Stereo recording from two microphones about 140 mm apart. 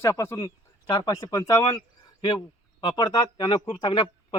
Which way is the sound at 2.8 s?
35° left (ahead or behind).